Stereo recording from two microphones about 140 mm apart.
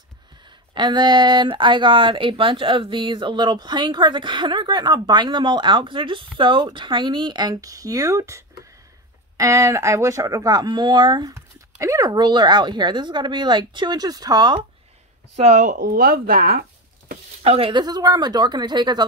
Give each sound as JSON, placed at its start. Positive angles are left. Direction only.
{"t": 0.5, "sound": "speech", "side_deg": -35}
{"t": 15.3, "sound": "speech", "side_deg": -55}
{"t": 17.4, "sound": "speech", "side_deg": -45}